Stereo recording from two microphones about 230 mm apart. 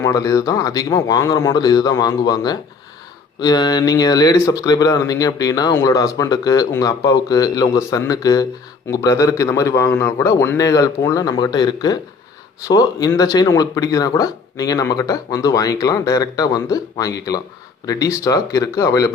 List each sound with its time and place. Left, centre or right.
0.0 s speech: centre